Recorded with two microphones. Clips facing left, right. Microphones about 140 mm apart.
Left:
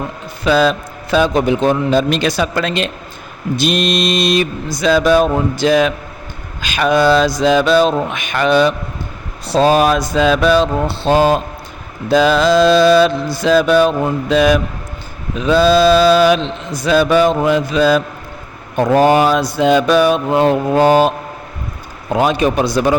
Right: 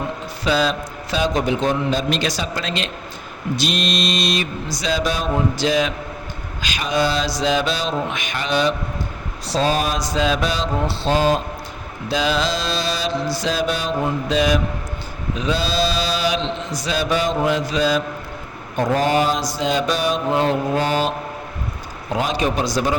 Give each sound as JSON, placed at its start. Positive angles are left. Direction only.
{"t": 0.4, "sound": "mantra", "side_deg": 55}
{"t": 22.1, "sound": "mantra", "side_deg": 60}